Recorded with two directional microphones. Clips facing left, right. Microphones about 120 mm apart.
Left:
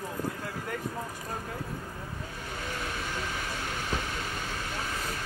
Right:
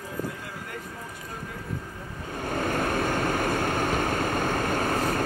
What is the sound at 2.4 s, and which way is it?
Vehicle, 55° right (ahead or behind).